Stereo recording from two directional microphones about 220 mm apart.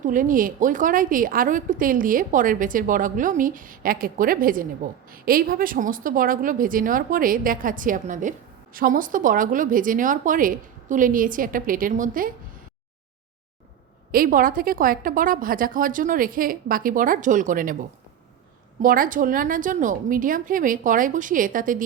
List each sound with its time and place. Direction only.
0.0 s a woman's voice: 35° right (ahead or behind)
14.1 s a woman's voice: 40° right (ahead or behind)
18.8 s a woman's voice: 40° right (ahead or behind)